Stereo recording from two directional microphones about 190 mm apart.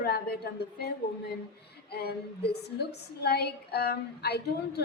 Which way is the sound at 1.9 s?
55° left (ahead or behind).